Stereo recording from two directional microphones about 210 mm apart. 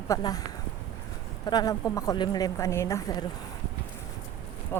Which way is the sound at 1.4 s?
20° left (ahead or behind).